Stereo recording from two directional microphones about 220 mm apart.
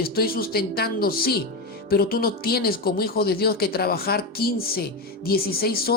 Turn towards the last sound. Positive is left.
turn(degrees=45)  # may be behind; listen again after turning